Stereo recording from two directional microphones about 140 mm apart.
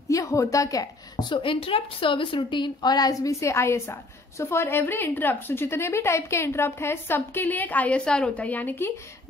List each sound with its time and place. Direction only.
0.1 s a woman's voice: 20° left (ahead or behind)